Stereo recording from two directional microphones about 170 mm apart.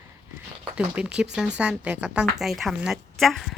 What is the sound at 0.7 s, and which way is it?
A woman's voice, 5° right (ahead or behind).